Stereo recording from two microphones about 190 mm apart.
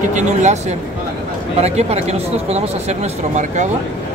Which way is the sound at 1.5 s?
35° right (ahead or behind).